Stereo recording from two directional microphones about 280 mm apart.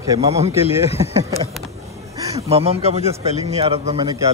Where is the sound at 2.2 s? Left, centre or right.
Centre.